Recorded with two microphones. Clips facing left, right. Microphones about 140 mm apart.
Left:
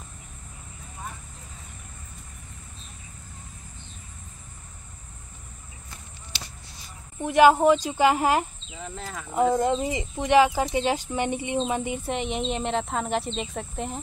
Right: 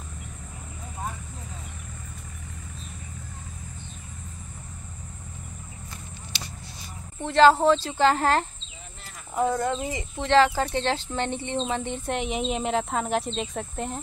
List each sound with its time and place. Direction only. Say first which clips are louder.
7.2 s speech: even; 15° left (ahead or behind)
8.7 s a sound: left 11 dB; 90° left
9.5 s speech: left 3 dB; 20° left (ahead or behind); by 14.0 s centre (ahead or behind)